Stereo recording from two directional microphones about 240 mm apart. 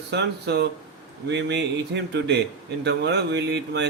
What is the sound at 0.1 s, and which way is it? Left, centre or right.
Speech, right.